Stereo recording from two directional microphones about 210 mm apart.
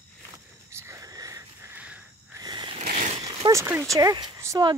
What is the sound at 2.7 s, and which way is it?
Vehicle, 35° right (ahead or behind).